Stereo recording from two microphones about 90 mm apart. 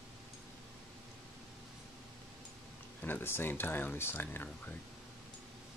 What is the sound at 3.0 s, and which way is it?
Speech, 25° left (ahead or behind).